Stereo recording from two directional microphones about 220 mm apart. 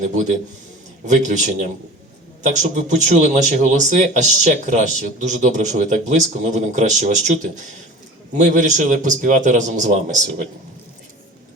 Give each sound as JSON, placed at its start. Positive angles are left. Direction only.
{"t": 1.0, "sound": "speech", "side_deg": -35}